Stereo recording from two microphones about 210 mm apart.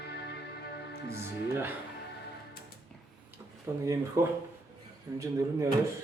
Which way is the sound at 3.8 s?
15° right (ahead or behind).